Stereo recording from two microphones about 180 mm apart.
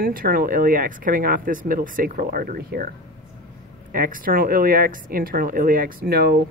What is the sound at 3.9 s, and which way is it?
Speech, 50° right (ahead or behind).